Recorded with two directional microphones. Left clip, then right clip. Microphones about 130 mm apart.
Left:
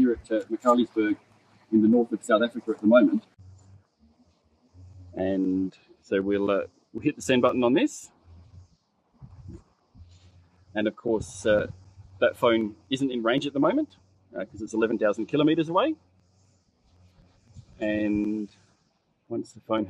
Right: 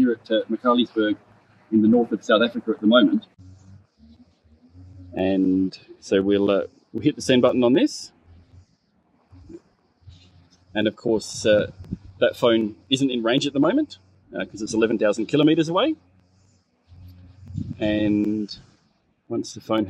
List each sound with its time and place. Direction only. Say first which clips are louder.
0.0 s speech: right 4 dB; 10° right (ahead or behind)
5.1 s speech: right 5 dB; 45° right (ahead or behind)
10.7 s speech: right 4 dB; 50° right (ahead or behind)
17.7 s speech: right 5 dB; 50° right (ahead or behind)
19.2 s speech: right 5 dB; 50° right (ahead or behind)